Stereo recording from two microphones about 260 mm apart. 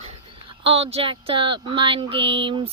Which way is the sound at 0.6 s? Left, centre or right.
Right.